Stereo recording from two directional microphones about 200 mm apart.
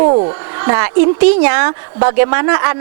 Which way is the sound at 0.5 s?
20° right (ahead or behind).